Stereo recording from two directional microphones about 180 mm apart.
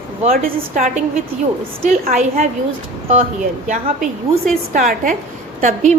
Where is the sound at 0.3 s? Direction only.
50° right (ahead or behind).